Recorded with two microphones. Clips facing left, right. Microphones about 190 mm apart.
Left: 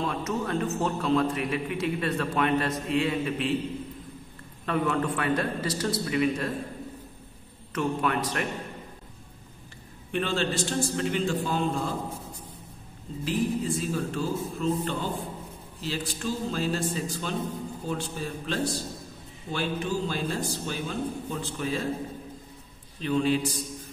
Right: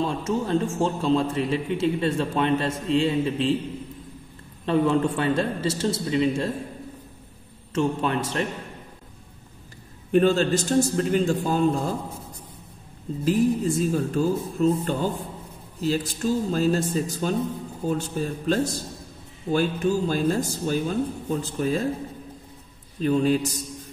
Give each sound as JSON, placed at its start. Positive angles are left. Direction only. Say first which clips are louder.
{"t": 0.0, "sound": "a man's voice", "louder": "right 4 dB", "side_deg": -30}
{"t": 4.6, "sound": "a man's voice", "louder": "right 6 dB", "side_deg": -30}
{"t": 7.7, "sound": "a man's voice", "louder": "right 3 dB", "side_deg": -25}
{"t": 10.1, "sound": "speech", "louder": "right 8 dB", "side_deg": -40}
{"t": 13.2, "sound": "speech", "louder": "right 6 dB", "side_deg": -45}
{"t": 22.9, "sound": "speech", "louder": "right 4 dB", "side_deg": -45}